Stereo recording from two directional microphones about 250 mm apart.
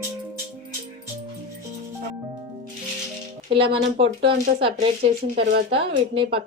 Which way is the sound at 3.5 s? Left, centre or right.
Right.